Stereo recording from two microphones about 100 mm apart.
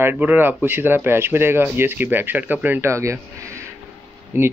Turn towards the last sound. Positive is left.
turn(degrees=-20)  # may be behind; listen again after turning